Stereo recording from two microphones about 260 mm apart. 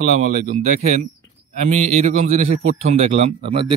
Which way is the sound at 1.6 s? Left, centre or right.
Right.